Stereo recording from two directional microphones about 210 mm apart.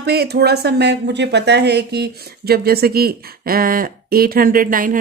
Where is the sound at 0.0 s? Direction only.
50° right (ahead or behind).